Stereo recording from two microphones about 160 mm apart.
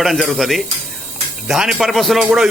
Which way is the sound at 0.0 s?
Centre (ahead or behind).